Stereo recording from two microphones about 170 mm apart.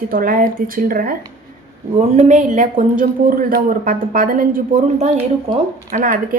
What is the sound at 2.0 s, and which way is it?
A man's voice, 40° right (ahead or behind).